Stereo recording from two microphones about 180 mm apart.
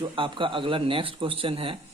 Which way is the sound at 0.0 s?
30° right (ahead or behind).